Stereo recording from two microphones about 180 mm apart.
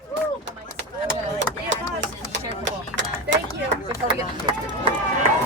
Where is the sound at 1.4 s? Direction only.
85° right.